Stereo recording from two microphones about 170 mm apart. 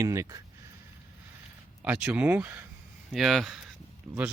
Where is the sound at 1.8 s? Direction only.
10° right (ahead or behind).